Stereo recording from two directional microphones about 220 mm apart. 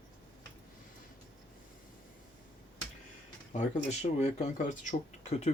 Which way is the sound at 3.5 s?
30° left (ahead or behind).